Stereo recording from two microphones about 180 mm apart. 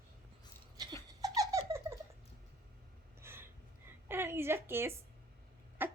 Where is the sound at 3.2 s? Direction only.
15° right (ahead or behind).